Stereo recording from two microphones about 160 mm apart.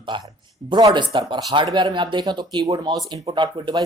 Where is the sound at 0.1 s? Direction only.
30° right (ahead or behind).